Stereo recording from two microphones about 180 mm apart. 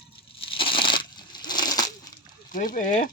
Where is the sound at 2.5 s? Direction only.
50° left (ahead or behind).